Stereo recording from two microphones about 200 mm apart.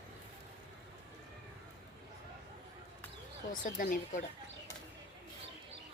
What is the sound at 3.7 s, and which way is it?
Speech, 45° left (ahead or behind).